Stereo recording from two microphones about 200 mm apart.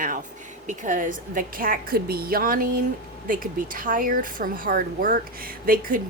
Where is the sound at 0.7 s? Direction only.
40° right (ahead or behind).